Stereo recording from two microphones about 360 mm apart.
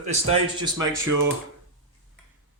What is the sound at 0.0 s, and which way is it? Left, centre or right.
Speech, centre.